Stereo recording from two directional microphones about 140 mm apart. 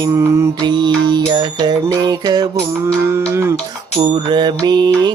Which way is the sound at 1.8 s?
25° right (ahead or behind).